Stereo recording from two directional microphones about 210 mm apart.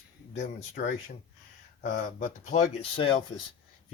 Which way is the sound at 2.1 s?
35° left (ahead or behind).